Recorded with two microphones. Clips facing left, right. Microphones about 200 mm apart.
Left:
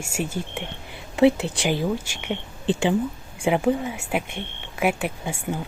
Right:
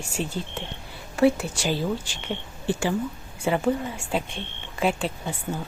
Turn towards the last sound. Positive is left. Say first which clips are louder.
# left 2 dB
turn(degrees=10)  # may be behind; listen again after turning